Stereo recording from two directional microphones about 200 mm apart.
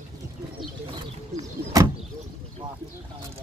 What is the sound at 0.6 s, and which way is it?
Vehicle, 25° right (ahead or behind).